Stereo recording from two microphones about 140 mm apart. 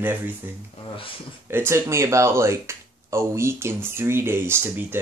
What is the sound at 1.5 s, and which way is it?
Speech, 15° right (ahead or behind).